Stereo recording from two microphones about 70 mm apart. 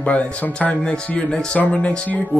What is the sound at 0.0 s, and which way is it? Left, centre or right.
Speech, centre.